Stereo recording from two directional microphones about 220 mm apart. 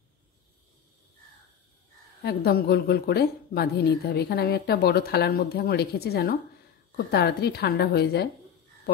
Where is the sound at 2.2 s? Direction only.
45° left (ahead or behind).